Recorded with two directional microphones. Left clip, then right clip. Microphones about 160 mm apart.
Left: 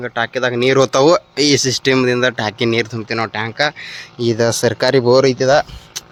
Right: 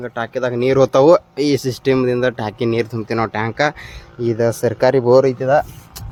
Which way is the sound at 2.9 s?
20° right (ahead or behind).